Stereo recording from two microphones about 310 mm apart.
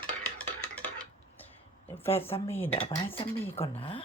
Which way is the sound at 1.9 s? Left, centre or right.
Centre.